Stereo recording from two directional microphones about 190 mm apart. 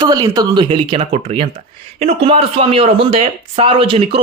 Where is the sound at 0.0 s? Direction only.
20° right (ahead or behind).